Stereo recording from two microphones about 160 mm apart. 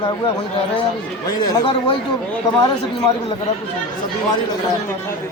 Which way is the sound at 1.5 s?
30° left (ahead or behind).